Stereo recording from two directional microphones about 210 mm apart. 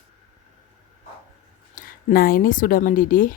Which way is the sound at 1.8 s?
45° left (ahead or behind).